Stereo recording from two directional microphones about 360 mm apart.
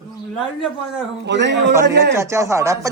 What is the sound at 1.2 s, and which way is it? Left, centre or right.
Speech, right.